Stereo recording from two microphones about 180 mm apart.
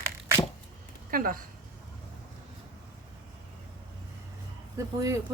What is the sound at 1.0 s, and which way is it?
Speech, 50° right (ahead or behind).